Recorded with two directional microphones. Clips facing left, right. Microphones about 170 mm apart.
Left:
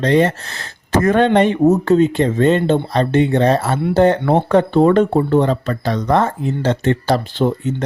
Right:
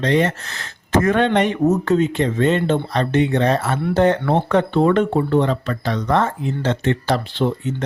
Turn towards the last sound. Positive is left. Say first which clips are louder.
# left 3 dB
turn(degrees=40)  # may be behind; listen again after turning